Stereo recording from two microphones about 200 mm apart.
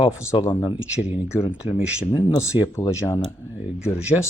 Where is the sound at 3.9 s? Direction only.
5° right (ahead or behind).